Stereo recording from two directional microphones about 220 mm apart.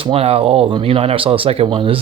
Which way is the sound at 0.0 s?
25° right (ahead or behind).